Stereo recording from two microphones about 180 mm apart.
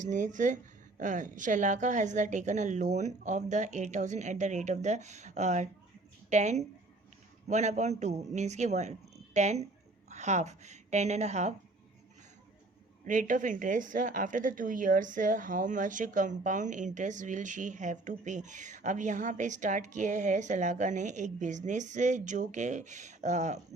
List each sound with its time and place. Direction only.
0.0 s a woman's voice: 45° right (ahead or behind)
13.1 s a woman's voice: 45° right (ahead or behind)